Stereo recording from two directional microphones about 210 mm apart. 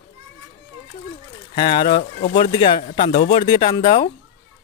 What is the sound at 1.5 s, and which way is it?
Speech, 25° left (ahead or behind).